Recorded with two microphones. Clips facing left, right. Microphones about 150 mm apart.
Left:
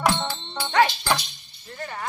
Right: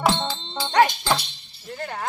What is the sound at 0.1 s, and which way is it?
Music, 20° right (ahead or behind).